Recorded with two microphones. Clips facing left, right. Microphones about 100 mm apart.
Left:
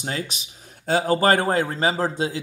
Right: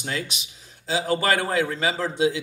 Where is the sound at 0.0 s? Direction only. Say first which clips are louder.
Left 1 dB; 35° left (ahead or behind).